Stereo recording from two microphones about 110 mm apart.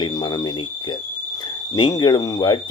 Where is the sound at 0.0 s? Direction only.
40° left (ahead or behind).